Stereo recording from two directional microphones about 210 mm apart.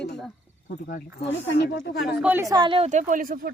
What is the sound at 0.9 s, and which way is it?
Speech, 50° left (ahead or behind).